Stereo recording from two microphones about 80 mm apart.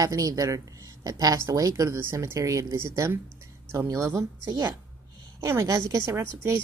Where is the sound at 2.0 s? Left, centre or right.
Right.